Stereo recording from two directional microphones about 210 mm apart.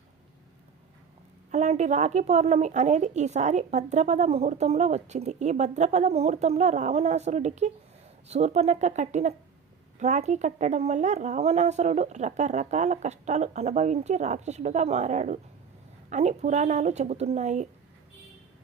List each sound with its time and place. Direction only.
1.5 s a woman's voice: 35° right (ahead or behind)